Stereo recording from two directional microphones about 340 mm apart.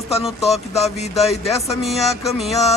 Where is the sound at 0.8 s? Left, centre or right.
Centre.